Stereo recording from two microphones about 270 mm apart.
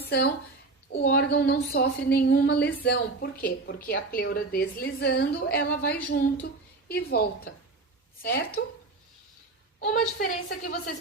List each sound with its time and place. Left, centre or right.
0.0 s a woman's voice: left
10.2 s a woman's voice: left